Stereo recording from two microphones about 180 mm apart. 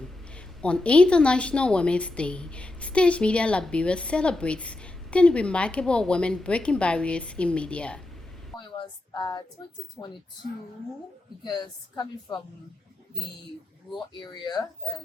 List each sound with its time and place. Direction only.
0.0 s a woman's voice: 5° left (ahead or behind)
8.8 s a sound: 25° left (ahead or behind)
10.0 s speech: 5° left (ahead or behind)
11.4 s a woman's voice: 25° left (ahead or behind)
14.2 s a woman's voice: 25° left (ahead or behind)